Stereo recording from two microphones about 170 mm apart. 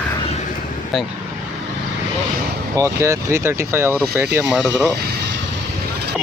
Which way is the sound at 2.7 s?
20° right (ahead or behind).